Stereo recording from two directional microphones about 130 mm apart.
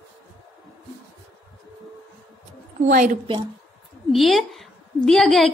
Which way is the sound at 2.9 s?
90° right.